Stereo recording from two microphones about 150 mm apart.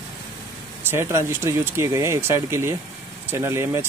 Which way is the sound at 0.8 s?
15° right (ahead or behind).